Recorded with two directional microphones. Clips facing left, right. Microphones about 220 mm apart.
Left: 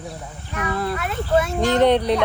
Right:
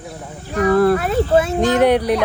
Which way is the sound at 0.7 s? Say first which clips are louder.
Right 12 dB; 50° right (ahead or behind).